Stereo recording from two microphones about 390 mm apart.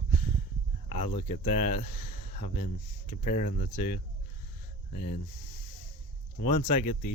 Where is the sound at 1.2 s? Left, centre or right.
Centre.